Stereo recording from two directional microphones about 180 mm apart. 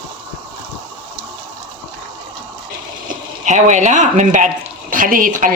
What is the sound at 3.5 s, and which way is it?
A woman's voice, 40° right (ahead or behind).